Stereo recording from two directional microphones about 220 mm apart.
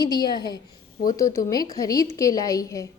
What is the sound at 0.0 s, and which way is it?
A woman's voice, 20° left (ahead or behind).